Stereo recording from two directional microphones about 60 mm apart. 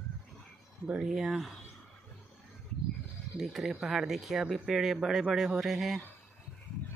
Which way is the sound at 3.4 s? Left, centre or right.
Centre.